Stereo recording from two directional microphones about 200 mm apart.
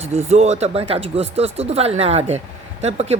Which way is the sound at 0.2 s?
30° right (ahead or behind).